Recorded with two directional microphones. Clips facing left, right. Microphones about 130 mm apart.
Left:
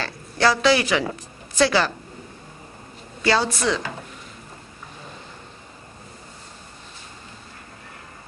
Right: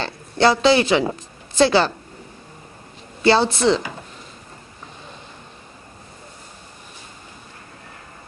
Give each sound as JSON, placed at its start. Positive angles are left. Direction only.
{"t": 0.0, "sound": "a woman's voice", "side_deg": -25}
{"t": 3.2, "sound": "a woman's voice", "side_deg": -30}